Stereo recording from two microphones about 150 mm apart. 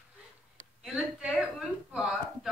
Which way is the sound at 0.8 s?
5° right (ahead or behind).